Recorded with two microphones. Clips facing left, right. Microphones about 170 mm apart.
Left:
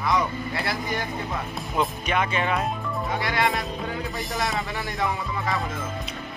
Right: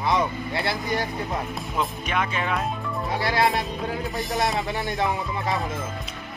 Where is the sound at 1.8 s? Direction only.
Centre (ahead or behind).